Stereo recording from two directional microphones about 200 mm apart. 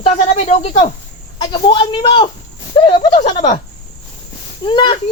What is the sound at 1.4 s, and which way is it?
A man's voice, 20° left (ahead or behind).